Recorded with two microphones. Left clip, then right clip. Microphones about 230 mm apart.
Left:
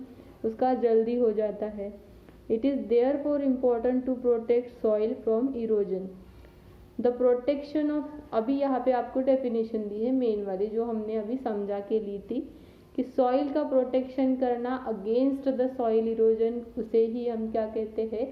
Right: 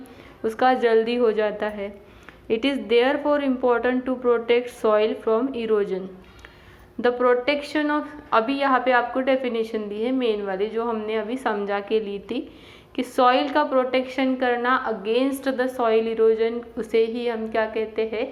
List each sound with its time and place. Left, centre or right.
0.4 s a woman's voice: centre
7.0 s a woman's voice: centre
13.5 s a woman's voice: centre